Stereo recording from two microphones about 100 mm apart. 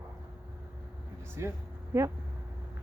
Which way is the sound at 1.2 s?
25° right (ahead or behind).